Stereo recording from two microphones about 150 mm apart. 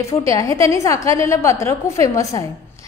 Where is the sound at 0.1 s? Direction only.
20° left (ahead or behind).